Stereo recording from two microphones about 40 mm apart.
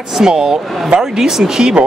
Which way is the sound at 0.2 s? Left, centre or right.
Centre.